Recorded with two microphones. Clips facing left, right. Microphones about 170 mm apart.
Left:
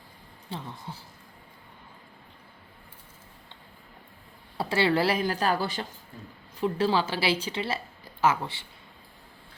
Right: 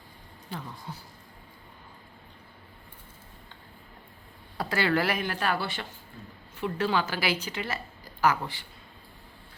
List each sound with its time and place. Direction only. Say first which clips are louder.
0.5 s speech: left 1 dB; 30° left (ahead or behind)
4.5 s speech: left 2 dB; 25° left (ahead or behind)